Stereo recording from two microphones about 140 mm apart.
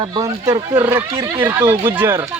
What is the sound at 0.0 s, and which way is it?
Speech, 30° right (ahead or behind).